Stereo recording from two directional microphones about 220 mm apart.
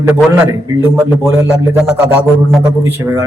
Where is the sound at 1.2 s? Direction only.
15° right (ahead or behind).